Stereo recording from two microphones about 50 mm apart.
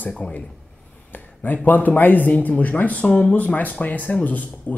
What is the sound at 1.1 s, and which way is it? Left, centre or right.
Speech, left.